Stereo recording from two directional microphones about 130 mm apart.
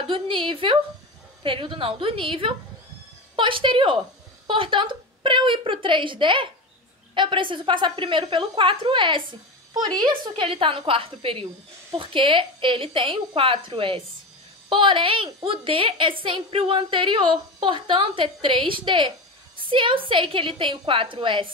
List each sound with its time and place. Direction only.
0.0 s a woman's voice: 40° right (ahead or behind)